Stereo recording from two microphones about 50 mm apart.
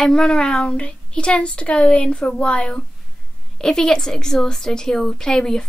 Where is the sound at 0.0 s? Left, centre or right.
Centre.